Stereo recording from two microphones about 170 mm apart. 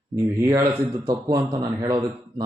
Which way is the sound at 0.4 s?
15° right (ahead or behind).